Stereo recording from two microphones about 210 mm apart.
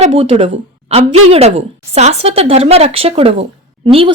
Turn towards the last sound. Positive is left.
turn(degrees=-25)  # may be behind; listen again after turning